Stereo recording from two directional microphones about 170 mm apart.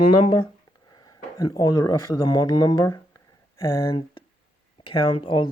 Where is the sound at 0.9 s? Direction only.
20° left (ahead or behind).